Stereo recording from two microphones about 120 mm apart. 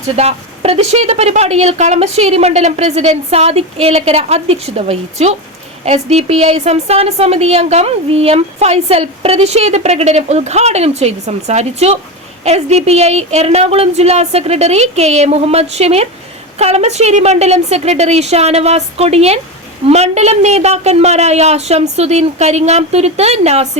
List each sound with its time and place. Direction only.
0.0 s a woman's voice: 60° right (ahead or behind)